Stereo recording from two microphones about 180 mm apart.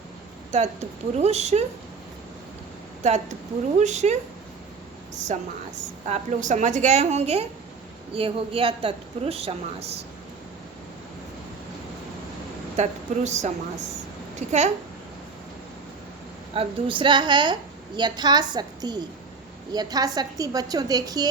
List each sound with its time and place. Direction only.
0.5 s speech: 40° right (ahead or behind)
3.0 s speech: 40° right (ahead or behind)
12.7 s speech: 40° right (ahead or behind)
16.6 s a woman's voice: 30° right (ahead or behind)